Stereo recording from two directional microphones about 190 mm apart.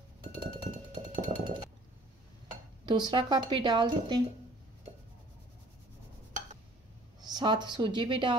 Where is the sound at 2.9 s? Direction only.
25° right (ahead or behind).